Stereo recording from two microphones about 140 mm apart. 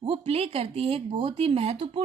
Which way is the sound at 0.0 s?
40° right (ahead or behind).